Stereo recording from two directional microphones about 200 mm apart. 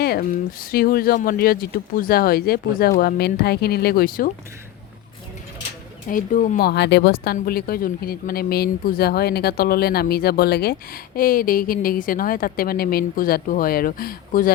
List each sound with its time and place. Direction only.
0.0 s speech: 50° left (ahead or behind)
6.1 s speech: 40° left (ahead or behind)